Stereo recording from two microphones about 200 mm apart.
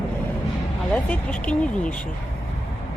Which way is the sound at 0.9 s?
5° left (ahead or behind).